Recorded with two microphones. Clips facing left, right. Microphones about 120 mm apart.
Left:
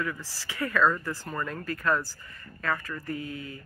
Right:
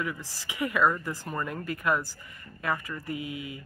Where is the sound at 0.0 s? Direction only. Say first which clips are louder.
Left 1 dB; 15° right (ahead or behind).